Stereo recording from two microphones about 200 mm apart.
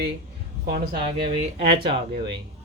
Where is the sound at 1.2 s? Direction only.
25° right (ahead or behind).